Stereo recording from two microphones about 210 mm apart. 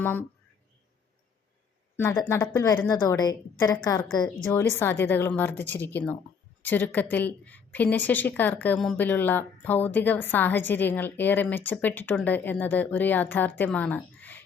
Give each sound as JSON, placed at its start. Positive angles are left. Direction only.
{"t": 0.0, "sound": "a woman's voice", "side_deg": 10}
{"t": 2.0, "sound": "a woman's voice", "side_deg": 10}